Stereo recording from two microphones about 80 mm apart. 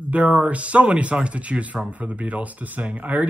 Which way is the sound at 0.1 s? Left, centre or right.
Centre.